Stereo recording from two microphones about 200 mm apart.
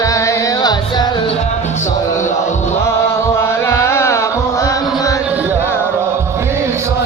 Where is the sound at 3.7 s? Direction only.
15° left (ahead or behind).